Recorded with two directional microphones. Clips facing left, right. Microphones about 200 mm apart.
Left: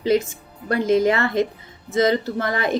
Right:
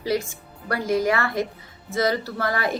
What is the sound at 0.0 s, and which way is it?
A woman's voice, 20° left (ahead or behind).